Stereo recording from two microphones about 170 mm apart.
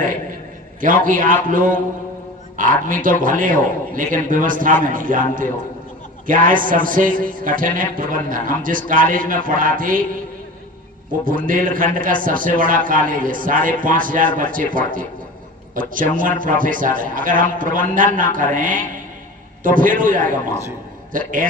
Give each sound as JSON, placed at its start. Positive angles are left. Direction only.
{"t": 0.8, "sound": "a man's voice", "side_deg": -50}
{"t": 11.3, "sound": "a man's voice", "side_deg": -55}